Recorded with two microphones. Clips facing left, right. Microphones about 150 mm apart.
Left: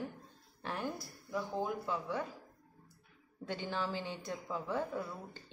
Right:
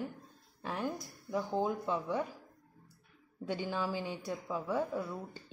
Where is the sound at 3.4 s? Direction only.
15° right (ahead or behind).